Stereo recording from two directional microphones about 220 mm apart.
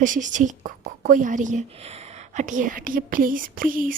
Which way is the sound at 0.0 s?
35° right (ahead or behind).